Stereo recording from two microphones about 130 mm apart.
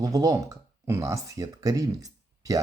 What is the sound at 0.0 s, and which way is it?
Speech, 30° right (ahead or behind).